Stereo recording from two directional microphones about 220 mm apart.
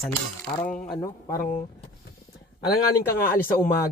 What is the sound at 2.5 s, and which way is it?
Speech, 45° left (ahead or behind).